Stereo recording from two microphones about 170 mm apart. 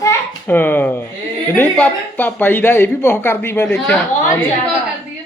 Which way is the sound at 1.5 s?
10° left (ahead or behind).